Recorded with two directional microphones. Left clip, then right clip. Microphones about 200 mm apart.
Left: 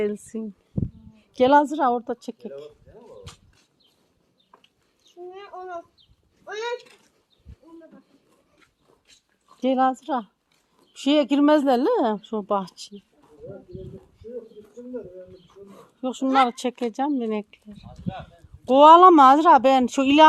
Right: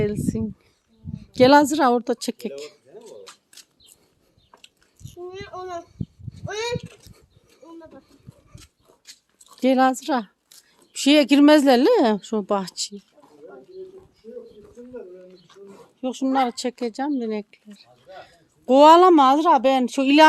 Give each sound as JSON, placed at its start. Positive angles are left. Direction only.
{"t": 0.0, "sound": "speech", "side_deg": -10}
{"t": 1.3, "sound": "a woman's voice", "side_deg": -25}
{"t": 5.0, "sound": "child singing", "side_deg": -65}
{"t": 6.4, "sound": "a sound", "side_deg": -30}
{"t": 9.6, "sound": "speech", "side_deg": -25}
{"t": 16.0, "sound": "speech", "side_deg": -5}
{"t": 18.7, "sound": "speech", "side_deg": -20}
{"t": 19.1, "sound": "speech", "side_deg": 0}